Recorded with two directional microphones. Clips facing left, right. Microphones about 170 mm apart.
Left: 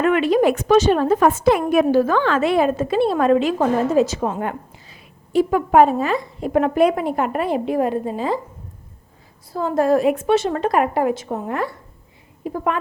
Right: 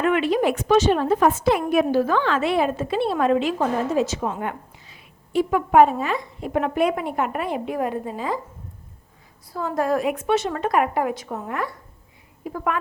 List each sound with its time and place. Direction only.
0.0 s a woman's voice: 40° left (ahead or behind)
9.5 s a woman's voice: 30° left (ahead or behind)